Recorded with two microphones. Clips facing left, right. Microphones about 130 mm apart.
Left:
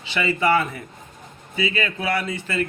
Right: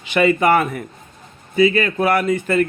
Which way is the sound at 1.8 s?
50° right (ahead or behind).